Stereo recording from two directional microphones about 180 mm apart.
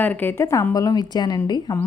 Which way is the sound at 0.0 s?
10° left (ahead or behind).